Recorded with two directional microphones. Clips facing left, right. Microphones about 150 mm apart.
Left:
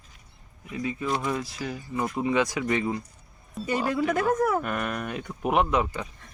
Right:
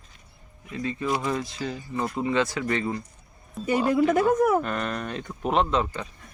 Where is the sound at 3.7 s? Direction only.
15° right (ahead or behind).